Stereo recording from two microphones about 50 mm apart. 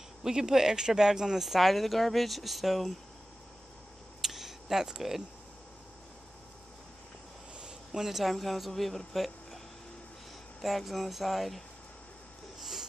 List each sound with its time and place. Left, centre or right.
0.2 s speech: centre
4.2 s a sound: centre
7.5 s speech: centre
10.6 s speech: centre
12.5 s wheeze: centre